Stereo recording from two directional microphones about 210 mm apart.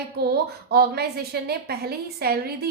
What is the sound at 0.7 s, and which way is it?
A woman's voice, 50° right (ahead or behind).